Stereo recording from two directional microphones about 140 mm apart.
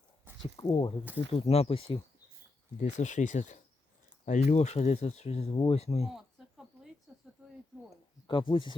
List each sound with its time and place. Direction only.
0.5 s speech: 40° left (ahead or behind)
2.7 s speech: 55° left (ahead or behind)
6.1 s a sound: centre (ahead or behind)
8.3 s speech: 35° left (ahead or behind)